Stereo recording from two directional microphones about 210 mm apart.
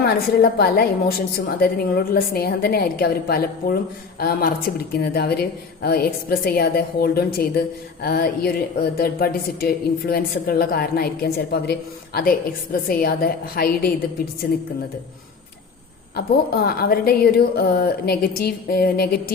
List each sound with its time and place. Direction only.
0.0 s a woman's voice: 50° left (ahead or behind)
16.6 s a woman's voice: 45° left (ahead or behind)